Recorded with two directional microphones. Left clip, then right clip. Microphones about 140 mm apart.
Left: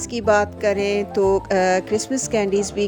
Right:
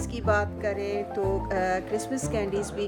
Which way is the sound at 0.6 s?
80° left.